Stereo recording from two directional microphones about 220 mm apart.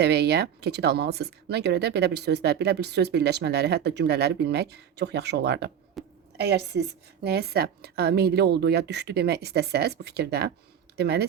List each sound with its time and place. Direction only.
0.0 s a woman's voice: 50° right (ahead or behind)
6.0 s a sound: centre (ahead or behind)
6.3 s a woman's voice: 50° right (ahead or behind)